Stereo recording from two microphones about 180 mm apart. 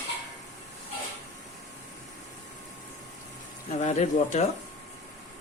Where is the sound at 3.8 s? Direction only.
40° left (ahead or behind).